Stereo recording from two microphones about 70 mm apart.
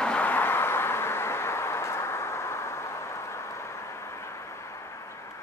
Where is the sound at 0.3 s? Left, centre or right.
Left.